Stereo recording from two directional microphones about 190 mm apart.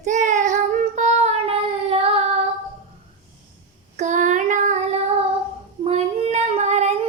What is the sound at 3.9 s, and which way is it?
Child singing, 40° right (ahead or behind).